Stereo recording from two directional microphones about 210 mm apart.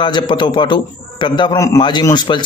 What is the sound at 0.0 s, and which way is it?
A man's voice, 20° left (ahead or behind).